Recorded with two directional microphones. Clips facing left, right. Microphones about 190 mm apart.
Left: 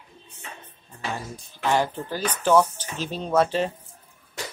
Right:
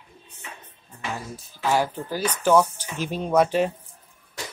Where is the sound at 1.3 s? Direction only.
10° right (ahead or behind).